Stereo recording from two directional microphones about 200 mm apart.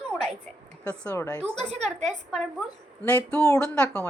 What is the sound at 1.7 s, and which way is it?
Speech, 35° right (ahead or behind).